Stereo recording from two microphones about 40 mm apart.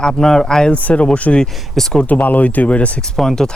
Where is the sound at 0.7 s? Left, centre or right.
Left.